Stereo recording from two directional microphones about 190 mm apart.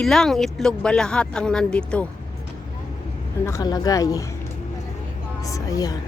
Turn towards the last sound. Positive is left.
turn(degrees=20)  # may be behind; listen again after turning